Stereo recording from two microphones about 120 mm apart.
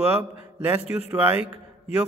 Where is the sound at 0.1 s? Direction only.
15° right (ahead or behind).